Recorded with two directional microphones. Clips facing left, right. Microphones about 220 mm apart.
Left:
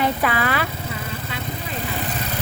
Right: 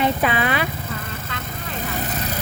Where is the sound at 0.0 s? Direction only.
20° right (ahead or behind).